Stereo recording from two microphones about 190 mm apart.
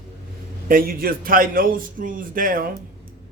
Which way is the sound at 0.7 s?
50° right (ahead or behind).